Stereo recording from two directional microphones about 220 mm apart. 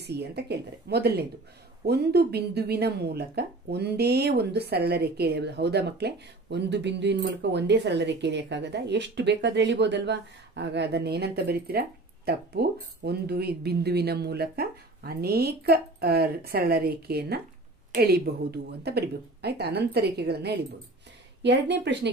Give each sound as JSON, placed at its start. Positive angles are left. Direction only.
{"t": 0.0, "sound": "speech", "side_deg": -50}